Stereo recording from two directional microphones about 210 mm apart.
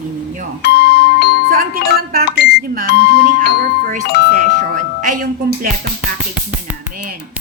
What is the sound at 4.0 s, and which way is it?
Speech, 55° left (ahead or behind).